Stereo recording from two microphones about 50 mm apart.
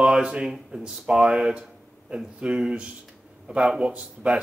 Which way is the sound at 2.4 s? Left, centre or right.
Centre.